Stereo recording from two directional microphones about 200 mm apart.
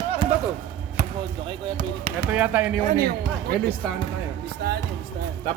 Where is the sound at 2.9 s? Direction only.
50° right (ahead or behind).